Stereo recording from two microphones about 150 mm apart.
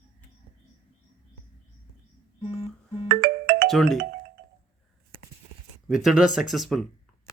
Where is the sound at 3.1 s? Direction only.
75° right (ahead or behind).